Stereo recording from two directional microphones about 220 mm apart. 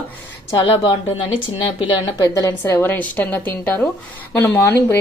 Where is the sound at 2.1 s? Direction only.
15° left (ahead or behind).